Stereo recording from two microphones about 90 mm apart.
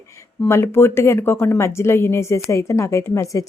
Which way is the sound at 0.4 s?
30° left (ahead or behind).